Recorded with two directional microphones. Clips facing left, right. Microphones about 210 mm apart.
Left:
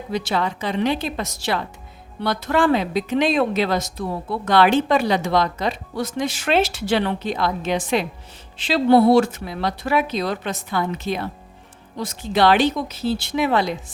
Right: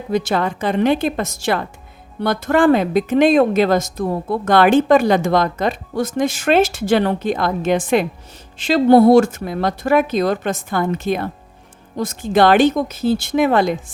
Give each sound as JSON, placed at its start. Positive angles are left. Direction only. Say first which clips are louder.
{"t": 0.1, "sound": "speech", "louder": "right 5 dB", "side_deg": -50}